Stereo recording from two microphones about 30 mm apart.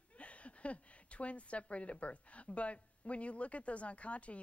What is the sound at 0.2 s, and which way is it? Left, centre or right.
Speech, left.